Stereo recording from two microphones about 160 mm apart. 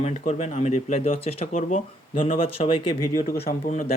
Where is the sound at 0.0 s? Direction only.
45° left (ahead or behind).